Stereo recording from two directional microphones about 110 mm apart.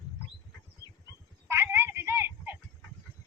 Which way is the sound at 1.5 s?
25° right (ahead or behind).